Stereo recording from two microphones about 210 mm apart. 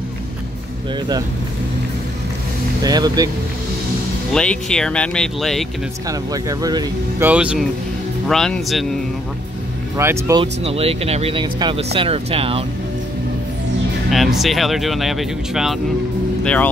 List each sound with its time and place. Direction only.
2.8 s speech: 20° right (ahead or behind)
4.3 s speech: 5° left (ahead or behind)
6.0 s speech: 15° right (ahead or behind)
7.2 s speech: 5° right (ahead or behind)
9.9 s speech: 15° right (ahead or behind)
10.4 s speech: 30° right (ahead or behind)
14.1 s speech: centre (ahead or behind)